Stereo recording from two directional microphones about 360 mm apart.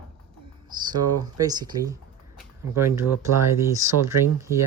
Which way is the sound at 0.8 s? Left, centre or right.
Centre.